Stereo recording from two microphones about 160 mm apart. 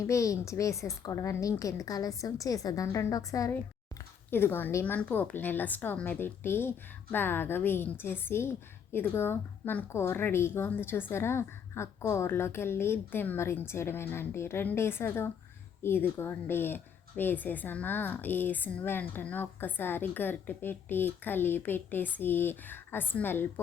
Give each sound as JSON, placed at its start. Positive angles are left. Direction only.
{"t": 0.0, "sound": "a woman's voice", "side_deg": 20}